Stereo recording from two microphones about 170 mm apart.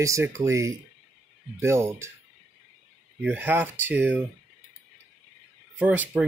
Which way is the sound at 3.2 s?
10° right (ahead or behind).